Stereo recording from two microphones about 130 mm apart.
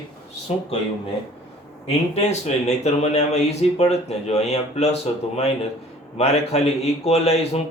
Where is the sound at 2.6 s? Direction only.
55° left (ahead or behind).